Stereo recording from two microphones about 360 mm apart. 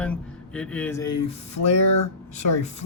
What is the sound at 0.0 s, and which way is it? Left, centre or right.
Speech, centre.